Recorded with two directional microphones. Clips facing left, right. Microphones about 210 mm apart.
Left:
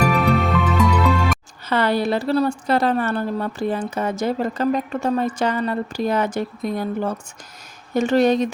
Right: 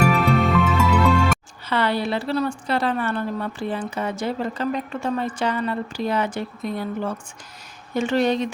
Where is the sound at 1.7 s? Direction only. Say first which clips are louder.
Left 3 dB; 45° left (ahead or behind).